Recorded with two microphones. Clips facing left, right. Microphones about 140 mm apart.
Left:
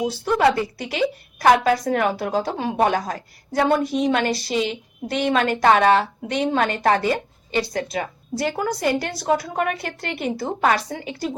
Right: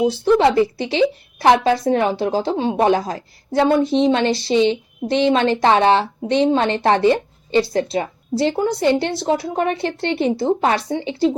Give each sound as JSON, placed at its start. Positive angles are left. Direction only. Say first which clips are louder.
{"t": 0.0, "sound": "a woman's voice", "louder": "right 4 dB", "side_deg": -25}